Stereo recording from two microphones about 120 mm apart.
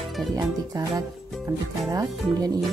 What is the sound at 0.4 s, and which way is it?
Speech, 30° right (ahead or behind).